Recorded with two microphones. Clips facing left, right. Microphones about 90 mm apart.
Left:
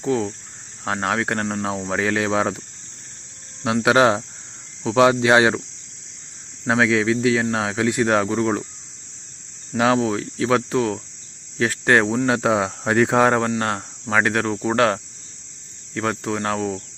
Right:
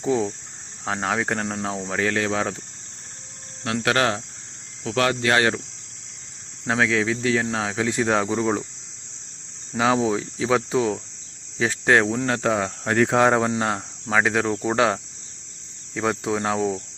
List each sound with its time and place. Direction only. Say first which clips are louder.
0.0 s speech: even; centre (ahead or behind)
3.8 s speech: left 6 dB; 20° left (ahead or behind)
6.7 s speech: left 3 dB; 5° left (ahead or behind)
9.9 s speech: left 1 dB; 10° right (ahead or behind)